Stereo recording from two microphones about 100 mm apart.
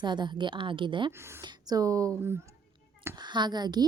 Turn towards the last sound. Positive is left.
turn(degrees=-45)  # may be behind; listen again after turning